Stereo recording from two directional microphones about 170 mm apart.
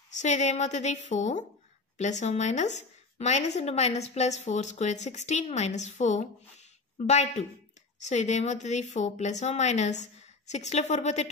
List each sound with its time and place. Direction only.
0.1 s a woman's voice: 45° left (ahead or behind)